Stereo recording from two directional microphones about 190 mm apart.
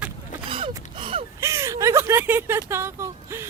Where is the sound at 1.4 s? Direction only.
15° right (ahead or behind).